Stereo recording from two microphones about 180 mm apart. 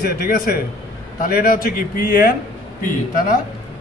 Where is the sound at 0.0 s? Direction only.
55° left (ahead or behind).